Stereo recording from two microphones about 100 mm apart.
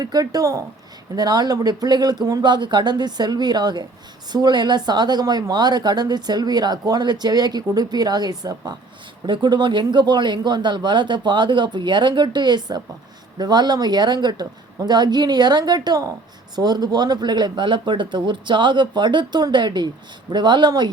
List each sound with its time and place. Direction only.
0.0 s speech: 40° right (ahead or behind)